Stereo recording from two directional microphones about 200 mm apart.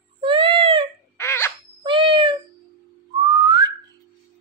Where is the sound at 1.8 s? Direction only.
25° right (ahead or behind).